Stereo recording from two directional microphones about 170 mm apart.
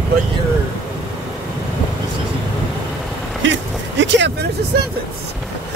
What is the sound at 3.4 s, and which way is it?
Speech, 90° right.